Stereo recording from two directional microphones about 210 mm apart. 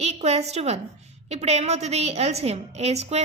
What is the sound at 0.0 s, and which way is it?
A woman's voice, 30° right (ahead or behind).